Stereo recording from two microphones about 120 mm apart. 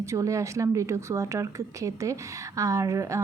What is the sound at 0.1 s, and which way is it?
A woman's voice, 25° right (ahead or behind).